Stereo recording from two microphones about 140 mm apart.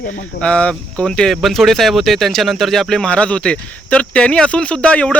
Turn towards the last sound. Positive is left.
turn(degrees=10)  # may be behind; listen again after turning